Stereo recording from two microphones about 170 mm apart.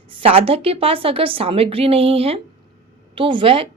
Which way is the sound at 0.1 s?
35° right (ahead or behind).